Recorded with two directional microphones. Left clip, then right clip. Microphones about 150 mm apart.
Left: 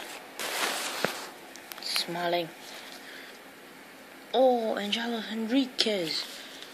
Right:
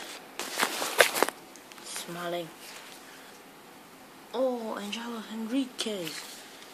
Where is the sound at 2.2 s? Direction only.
20° left (ahead or behind).